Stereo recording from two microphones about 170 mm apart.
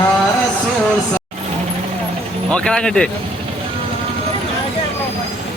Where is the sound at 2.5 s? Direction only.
5° left (ahead or behind).